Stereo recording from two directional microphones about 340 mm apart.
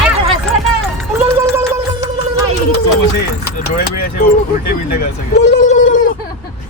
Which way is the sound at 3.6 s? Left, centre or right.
Left.